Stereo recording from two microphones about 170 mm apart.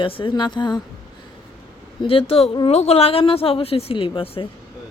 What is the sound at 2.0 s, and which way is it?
Speech, 30° left (ahead or behind).